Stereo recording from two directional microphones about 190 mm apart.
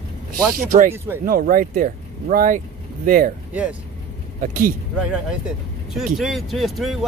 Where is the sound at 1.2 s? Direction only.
50° right (ahead or behind).